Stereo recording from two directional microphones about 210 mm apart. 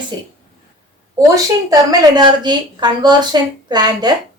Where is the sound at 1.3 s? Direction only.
15° right (ahead or behind).